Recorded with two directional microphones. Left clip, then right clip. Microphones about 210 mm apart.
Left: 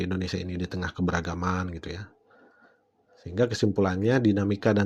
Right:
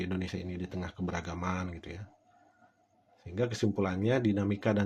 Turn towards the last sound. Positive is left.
turn(degrees=30)  # may be behind; listen again after turning